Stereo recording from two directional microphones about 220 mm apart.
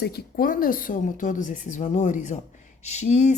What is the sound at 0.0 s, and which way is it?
A woman's voice, 45° left (ahead or behind).